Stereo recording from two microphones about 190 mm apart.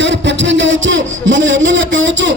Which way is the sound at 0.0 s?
70° right (ahead or behind).